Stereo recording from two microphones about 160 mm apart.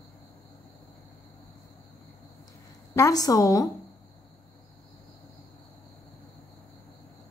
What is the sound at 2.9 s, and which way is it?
Speech, 20° left (ahead or behind).